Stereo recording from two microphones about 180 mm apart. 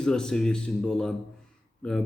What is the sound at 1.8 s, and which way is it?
Speech, 5° left (ahead or behind).